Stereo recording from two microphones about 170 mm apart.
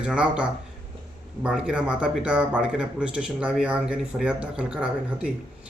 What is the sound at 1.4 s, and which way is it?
Speech, 5° right (ahead or behind).